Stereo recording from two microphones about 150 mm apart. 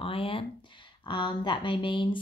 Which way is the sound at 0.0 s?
35° left (ahead or behind).